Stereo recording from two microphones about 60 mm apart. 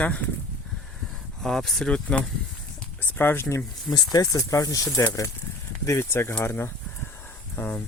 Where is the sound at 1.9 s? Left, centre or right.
Centre.